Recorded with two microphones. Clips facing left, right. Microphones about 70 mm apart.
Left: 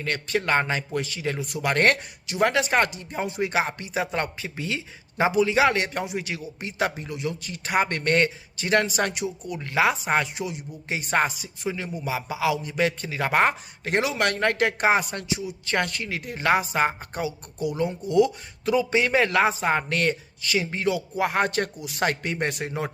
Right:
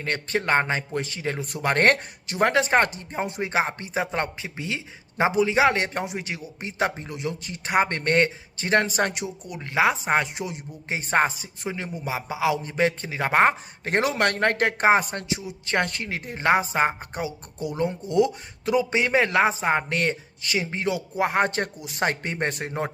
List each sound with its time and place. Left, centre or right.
0.0 s speech: right